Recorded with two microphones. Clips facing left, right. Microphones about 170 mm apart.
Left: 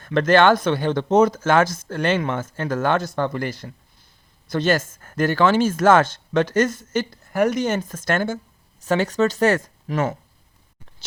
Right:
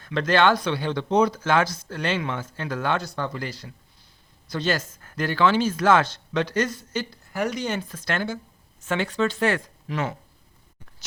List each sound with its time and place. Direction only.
0.0 s speech: 50° left (ahead or behind)